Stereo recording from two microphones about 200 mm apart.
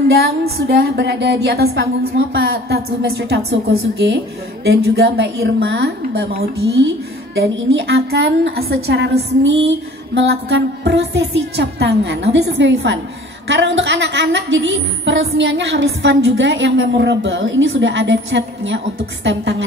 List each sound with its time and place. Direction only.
0.2 s music: 50° right (ahead or behind)
1.8 s a woman's voice: 55° right (ahead or behind)
4.6 s a woman's voice: 55° right (ahead or behind)